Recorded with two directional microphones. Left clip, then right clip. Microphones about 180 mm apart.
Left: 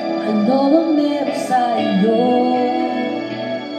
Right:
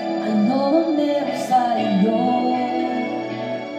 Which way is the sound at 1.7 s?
45° left (ahead or behind).